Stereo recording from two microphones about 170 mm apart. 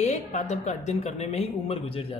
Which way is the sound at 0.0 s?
45° left (ahead or behind).